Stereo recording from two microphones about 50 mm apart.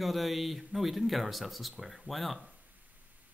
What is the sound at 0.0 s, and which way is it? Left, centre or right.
Speech, centre.